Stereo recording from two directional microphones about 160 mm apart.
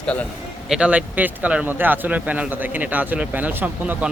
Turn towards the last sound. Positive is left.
turn(degrees=-10)  # may be behind; listen again after turning